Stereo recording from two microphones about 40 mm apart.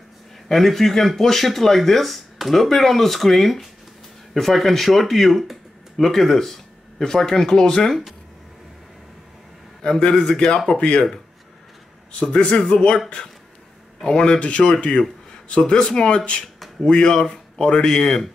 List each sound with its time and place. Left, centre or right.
0.5 s speech: centre
9.8 s a man's voice: centre
12.2 s speech: centre
14.1 s speech: left